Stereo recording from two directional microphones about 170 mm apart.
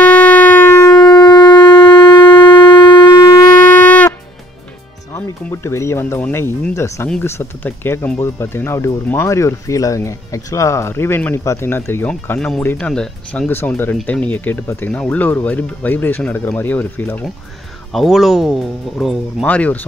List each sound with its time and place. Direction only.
0.0 s siren: 10° left (ahead or behind)
0.9 s shofar: 25° left (ahead or behind)
3.6 s music: 10° left (ahead or behind)
5.1 s speech: 15° left (ahead or behind)
17.9 s speech: centre (ahead or behind)